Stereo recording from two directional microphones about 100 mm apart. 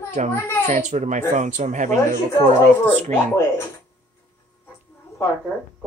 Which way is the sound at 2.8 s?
25° left (ahead or behind).